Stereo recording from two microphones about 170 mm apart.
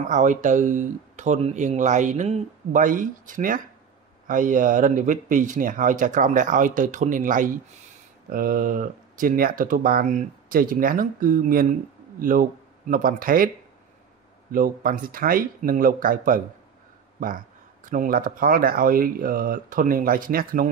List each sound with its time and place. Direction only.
0.0 s speech: 45° right (ahead or behind)
14.5 s speech: 55° right (ahead or behind)
17.8 s speech: 55° right (ahead or behind)